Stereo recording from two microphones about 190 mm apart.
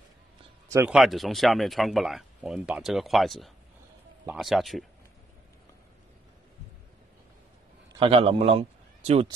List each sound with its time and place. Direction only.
0.7 s speech: 15° right (ahead or behind)
0.9 s speech: centre (ahead or behind)
8.0 s a man's voice: 30° right (ahead or behind)